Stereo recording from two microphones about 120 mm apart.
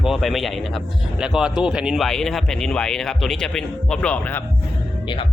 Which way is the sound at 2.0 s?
5° left (ahead or behind).